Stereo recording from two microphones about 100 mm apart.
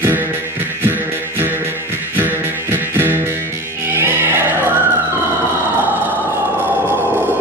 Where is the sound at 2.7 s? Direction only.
25° right (ahead or behind).